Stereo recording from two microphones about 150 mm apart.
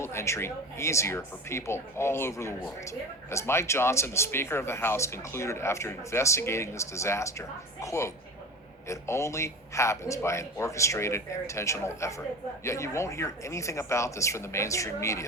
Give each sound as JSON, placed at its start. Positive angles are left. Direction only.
{"t": 0.0, "sound": "a man's voice", "side_deg": 20}